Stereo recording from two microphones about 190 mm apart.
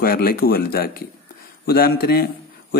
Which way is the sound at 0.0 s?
50° left (ahead or behind).